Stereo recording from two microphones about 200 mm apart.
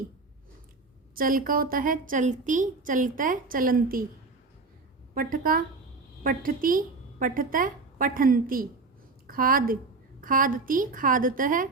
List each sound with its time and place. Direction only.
1.1 s a woman's voice: 45° right (ahead or behind)
5.1 s a woman's voice: 45° right (ahead or behind)